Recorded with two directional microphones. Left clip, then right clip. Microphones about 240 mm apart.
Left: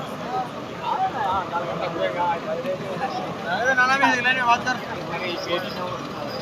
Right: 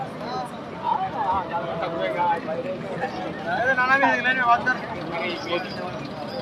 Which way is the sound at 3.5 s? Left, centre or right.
Left.